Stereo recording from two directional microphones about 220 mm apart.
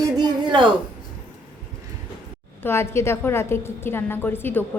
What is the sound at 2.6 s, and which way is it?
A woman's voice, 10° left (ahead or behind).